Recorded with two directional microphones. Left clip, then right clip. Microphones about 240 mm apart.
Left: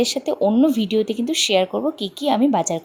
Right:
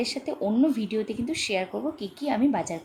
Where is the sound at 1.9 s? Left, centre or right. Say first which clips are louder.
Left 8 dB; centre.